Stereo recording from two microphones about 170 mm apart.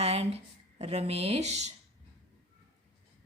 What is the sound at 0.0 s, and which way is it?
Speech, 40° right (ahead or behind).